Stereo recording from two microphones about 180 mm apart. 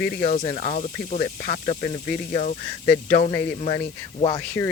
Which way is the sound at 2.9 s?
55° left (ahead or behind).